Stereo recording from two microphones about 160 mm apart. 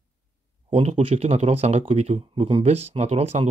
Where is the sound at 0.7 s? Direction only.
40° right (ahead or behind).